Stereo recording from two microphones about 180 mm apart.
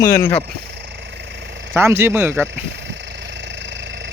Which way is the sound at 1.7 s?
15° right (ahead or behind).